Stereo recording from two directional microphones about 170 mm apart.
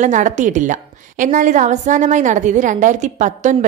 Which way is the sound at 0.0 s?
45° right (ahead or behind).